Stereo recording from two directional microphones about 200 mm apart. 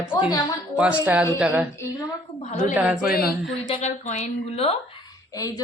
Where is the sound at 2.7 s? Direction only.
5° right (ahead or behind).